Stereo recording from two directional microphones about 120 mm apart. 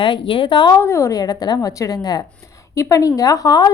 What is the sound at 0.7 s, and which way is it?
A woman's voice, 25° left (ahead or behind).